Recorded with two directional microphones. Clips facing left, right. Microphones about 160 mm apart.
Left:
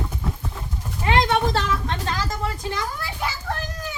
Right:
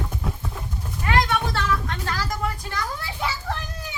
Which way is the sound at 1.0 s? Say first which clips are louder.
Left 3 dB; 25° left (ahead or behind).